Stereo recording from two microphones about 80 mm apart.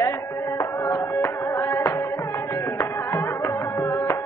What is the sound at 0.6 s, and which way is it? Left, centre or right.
Music, left.